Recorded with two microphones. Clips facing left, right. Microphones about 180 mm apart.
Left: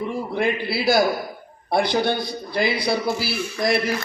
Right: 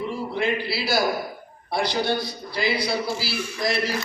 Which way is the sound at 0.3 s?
55° left (ahead or behind).